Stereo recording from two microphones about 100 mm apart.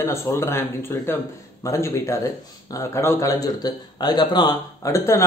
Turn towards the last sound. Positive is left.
turn(degrees=30)  # may be behind; listen again after turning